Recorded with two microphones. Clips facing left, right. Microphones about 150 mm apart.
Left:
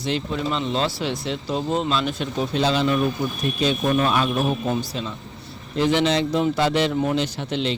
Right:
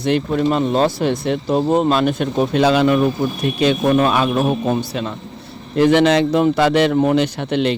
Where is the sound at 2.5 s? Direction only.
65° right (ahead or behind); by 4.5 s 80° right.